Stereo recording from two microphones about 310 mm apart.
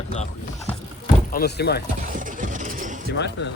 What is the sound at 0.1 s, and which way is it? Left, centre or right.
Speech, left.